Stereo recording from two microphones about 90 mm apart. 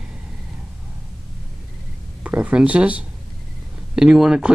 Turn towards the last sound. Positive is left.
turn(degrees=-10)  # may be behind; listen again after turning